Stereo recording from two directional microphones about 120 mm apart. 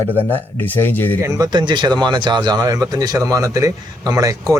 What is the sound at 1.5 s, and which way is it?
Speech, 40° right (ahead or behind).